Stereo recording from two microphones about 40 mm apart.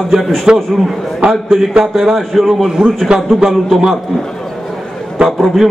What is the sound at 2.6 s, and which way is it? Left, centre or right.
A man's voice, centre.